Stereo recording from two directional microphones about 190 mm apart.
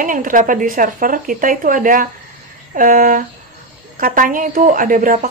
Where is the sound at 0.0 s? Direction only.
45° right (ahead or behind).